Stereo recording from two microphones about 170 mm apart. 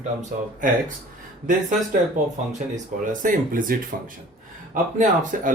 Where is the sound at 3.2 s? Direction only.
55° right (ahead or behind).